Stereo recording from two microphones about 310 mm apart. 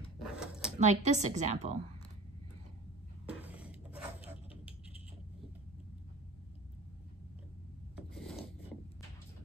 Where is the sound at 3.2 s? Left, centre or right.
Centre.